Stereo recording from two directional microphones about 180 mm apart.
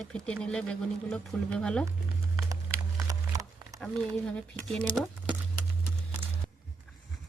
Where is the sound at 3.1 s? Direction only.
20° right (ahead or behind).